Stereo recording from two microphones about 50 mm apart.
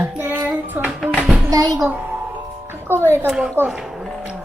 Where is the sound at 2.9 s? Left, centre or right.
Right.